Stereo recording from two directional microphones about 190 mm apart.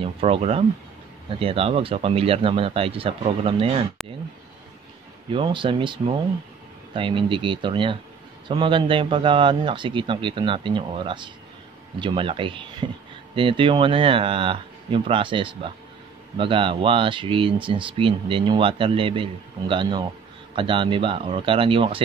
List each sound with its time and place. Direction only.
0.0 s speech: 30° right (ahead or behind)
5.3 s speech: 25° right (ahead or behind)